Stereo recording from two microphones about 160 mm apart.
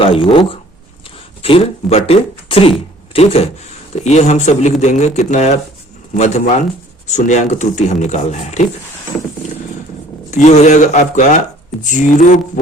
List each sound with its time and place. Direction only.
0.0 s speech: 35° left (ahead or behind)
10.3 s speech: 45° left (ahead or behind)